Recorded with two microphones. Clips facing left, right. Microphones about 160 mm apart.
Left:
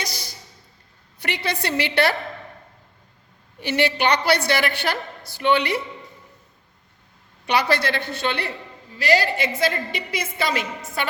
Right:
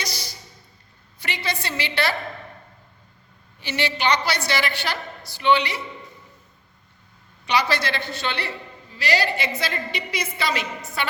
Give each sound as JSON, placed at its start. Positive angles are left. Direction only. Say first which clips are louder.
{"t": 1.2, "sound": "a woman's voice", "louder": "left 3 dB", "side_deg": 60}
{"t": 3.6, "sound": "a woman's voice", "louder": "left 4 dB", "side_deg": 55}
{"t": 7.4, "sound": "a woman's voice", "louder": "left 2 dB", "side_deg": 55}